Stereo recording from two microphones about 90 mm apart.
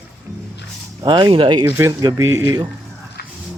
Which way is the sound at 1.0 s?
55° right (ahead or behind).